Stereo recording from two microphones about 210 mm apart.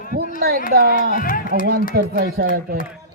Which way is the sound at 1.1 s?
40° left (ahead or behind).